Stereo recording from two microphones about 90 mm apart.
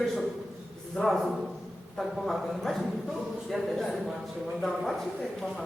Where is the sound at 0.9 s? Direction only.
Centre (ahead or behind).